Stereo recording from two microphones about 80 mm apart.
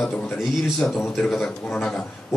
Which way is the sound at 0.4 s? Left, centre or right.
Centre.